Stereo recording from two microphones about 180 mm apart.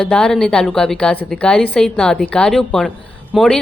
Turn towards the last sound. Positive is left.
turn(degrees=0)  # may be behind; listen again after turning